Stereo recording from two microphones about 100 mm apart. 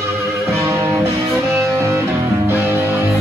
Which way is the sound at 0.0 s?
25° right (ahead or behind).